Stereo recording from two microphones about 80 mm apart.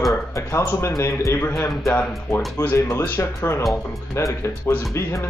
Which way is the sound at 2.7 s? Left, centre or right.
Left.